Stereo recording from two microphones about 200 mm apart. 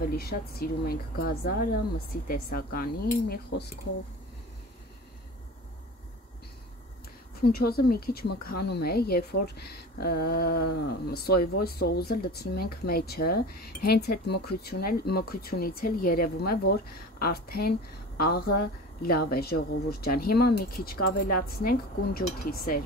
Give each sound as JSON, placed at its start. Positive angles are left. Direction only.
{"t": 0.1, "sound": "speech", "side_deg": 50}
{"t": 7.3, "sound": "speech", "side_deg": 50}